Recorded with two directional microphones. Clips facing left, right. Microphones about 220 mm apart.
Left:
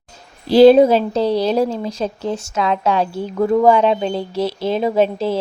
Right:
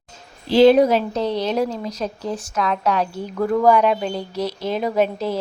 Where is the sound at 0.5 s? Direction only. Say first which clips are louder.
Left 4 dB; 30° left (ahead or behind).